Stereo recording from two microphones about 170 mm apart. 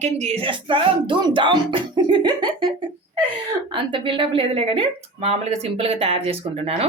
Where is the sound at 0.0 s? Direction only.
40° right (ahead or behind).